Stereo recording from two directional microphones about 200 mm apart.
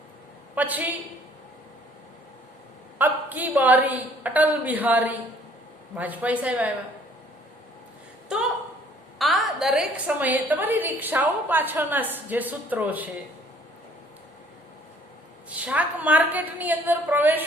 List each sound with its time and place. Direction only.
0.5 s a woman's voice: 10° right (ahead or behind)
3.0 s a woman's voice: 10° right (ahead or behind)
8.3 s a sound: 5° right (ahead or behind)
9.1 s a woman's voice: centre (ahead or behind)
15.4 s a woman's voice: 5° right (ahead or behind)